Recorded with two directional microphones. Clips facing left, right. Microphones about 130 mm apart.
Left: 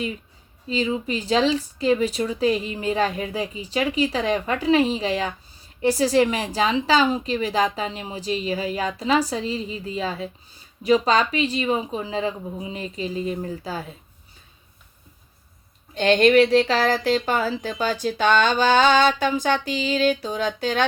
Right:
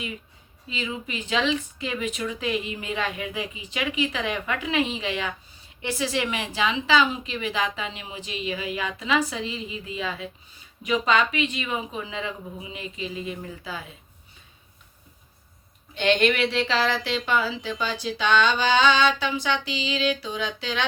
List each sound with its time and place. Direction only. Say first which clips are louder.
0.7 s speech: left 8 dB; 35° left (ahead or behind)
16.0 s speech: left 6 dB; 40° left (ahead or behind)